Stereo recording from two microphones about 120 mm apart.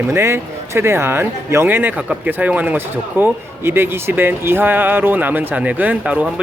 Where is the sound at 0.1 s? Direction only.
20° right (ahead or behind).